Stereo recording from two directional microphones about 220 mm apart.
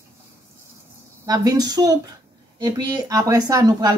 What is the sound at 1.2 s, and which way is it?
Speech, 15° right (ahead or behind).